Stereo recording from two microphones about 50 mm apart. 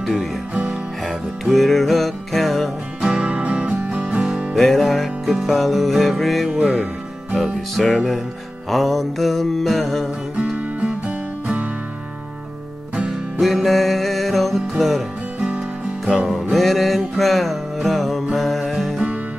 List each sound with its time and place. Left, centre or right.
1.4 s music: centre
3.0 s music: centre
4.6 s music: centre
7.9 s music: centre
10.3 s music: right
13.4 s music: centre
16.1 s music: centre
16.5 s music: centre